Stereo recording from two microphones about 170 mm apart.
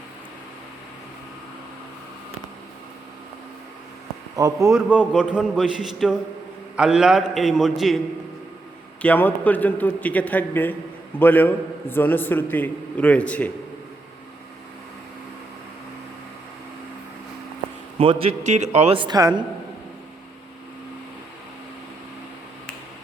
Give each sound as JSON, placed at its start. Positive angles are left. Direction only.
{"t": 4.4, "sound": "speech", "side_deg": -20}
{"t": 4.7, "sound": "a man's voice", "side_deg": -5}
{"t": 9.0, "sound": "a man's voice", "side_deg": 10}
{"t": 17.9, "sound": "a man's voice", "side_deg": -30}